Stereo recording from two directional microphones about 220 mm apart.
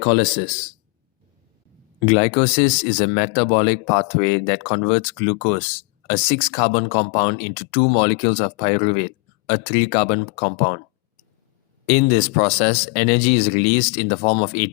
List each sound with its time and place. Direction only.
0.0 s speech: 25° left (ahead or behind)
2.0 s speech: 30° left (ahead or behind)
11.9 s speech: 30° left (ahead or behind)